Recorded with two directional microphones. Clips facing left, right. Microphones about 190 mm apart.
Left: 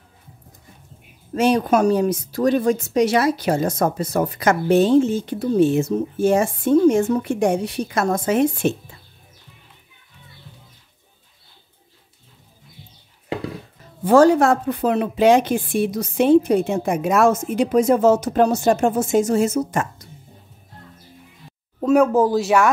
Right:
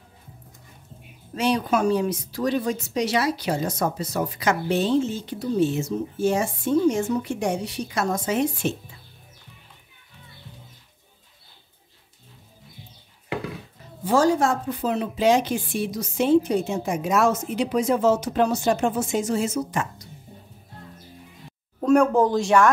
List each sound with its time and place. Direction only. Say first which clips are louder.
1.3 s speech: left 5 dB; 45° left (ahead or behind)
14.0 s speech: left 7 dB; 60° left (ahead or behind); by 19.9 s 45° left (ahead or behind)
21.8 s speech: left 2 dB; 5° left (ahead or behind)